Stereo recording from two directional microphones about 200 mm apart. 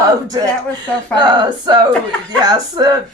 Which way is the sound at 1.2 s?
20° right (ahead or behind).